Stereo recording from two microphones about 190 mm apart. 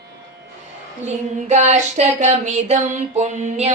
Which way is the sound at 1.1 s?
35° right (ahead or behind).